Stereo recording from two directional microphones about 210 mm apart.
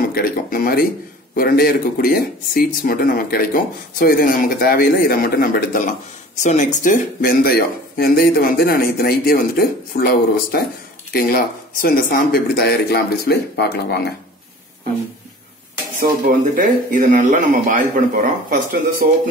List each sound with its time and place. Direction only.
0.1 s speech: 45° left (ahead or behind)
16.5 s speech: 40° right (ahead or behind)